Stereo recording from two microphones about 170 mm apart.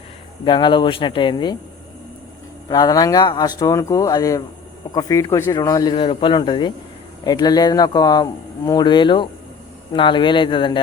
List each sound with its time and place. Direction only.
0.4 s a man's voice: 30° left (ahead or behind)
2.6 s a man's voice: 25° left (ahead or behind)